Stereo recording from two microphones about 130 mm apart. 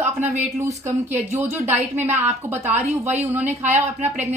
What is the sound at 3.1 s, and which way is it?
Speech, 15° right (ahead or behind).